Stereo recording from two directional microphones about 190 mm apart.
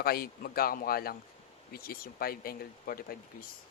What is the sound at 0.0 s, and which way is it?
Speech, 50° left (ahead or behind).